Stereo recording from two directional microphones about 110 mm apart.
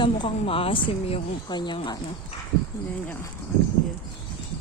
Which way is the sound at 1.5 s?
40° left (ahead or behind).